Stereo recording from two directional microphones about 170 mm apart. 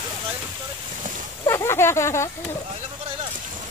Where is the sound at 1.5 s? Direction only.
15° left (ahead or behind).